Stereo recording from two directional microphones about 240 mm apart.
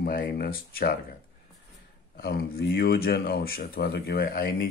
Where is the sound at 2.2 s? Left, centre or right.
Left.